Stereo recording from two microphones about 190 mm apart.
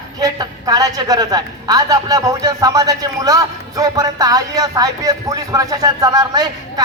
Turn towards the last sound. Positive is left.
turn(degrees=-20)  # may be behind; listen again after turning